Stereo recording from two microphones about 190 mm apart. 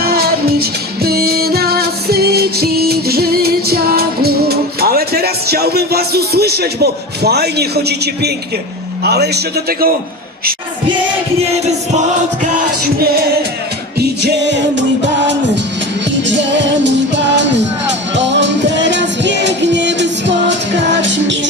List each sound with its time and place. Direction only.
0.0 s music: 55° right (ahead or behind)
9.0 s a man's voice: 60° right (ahead or behind)
12.5 s music: 50° right (ahead or behind)
14.2 s music: 65° right (ahead or behind)